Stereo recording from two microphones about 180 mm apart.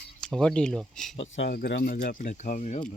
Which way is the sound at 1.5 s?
60° left (ahead or behind).